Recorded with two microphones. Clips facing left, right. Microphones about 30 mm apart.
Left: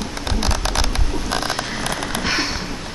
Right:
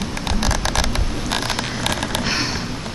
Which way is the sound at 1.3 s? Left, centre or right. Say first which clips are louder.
Even; right.